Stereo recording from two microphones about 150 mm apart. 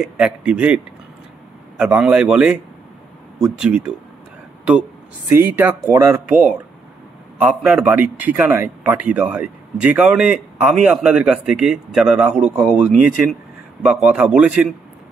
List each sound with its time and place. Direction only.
0.0 s a man's voice: 5° right (ahead or behind)
1.8 s a man's voice: 5° right (ahead or behind)
5.3 s a man's voice: 15° right (ahead or behind)
7.3 s a man's voice: 5° right (ahead or behind)